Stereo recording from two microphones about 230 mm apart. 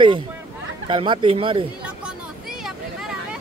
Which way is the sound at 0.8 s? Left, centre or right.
Right.